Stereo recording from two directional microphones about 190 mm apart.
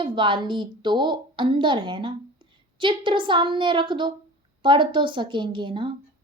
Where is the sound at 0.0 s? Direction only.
25° right (ahead or behind).